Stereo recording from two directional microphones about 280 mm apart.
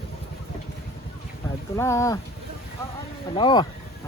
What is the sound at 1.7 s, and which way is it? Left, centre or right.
Speech, centre.